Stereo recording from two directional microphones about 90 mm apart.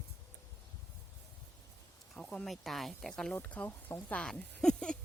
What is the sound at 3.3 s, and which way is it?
Speech, 20° left (ahead or behind).